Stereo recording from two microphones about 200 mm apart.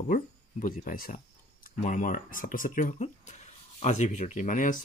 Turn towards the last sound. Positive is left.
turn(degrees=40)  # may be behind; listen again after turning